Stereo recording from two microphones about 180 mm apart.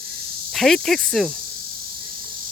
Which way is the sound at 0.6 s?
Centre (ahead or behind).